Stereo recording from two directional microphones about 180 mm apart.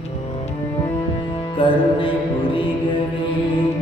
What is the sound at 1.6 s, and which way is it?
Music, 30° left (ahead or behind).